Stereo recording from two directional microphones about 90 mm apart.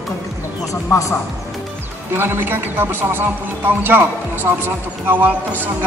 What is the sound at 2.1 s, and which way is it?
Speech, 25° right (ahead or behind).